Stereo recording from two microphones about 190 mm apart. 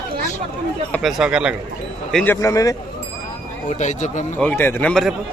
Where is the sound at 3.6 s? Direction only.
40° left (ahead or behind).